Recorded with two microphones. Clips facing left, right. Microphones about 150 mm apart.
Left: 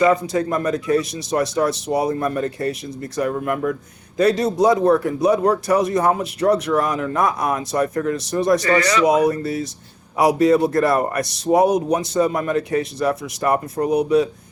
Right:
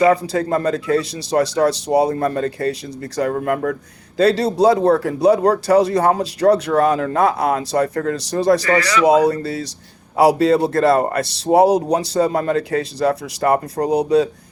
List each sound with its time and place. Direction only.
0.0 s a man's voice: 30° right (ahead or behind)
2.4 s speech: 25° left (ahead or behind)
3.3 s a man's voice: 35° right (ahead or behind)
8.8 s speech: 30° left (ahead or behind)
9.0 s a man's voice: 30° right (ahead or behind)